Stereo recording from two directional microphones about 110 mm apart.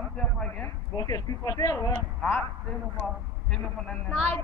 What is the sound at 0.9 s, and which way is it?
Speech, 35° left (ahead or behind).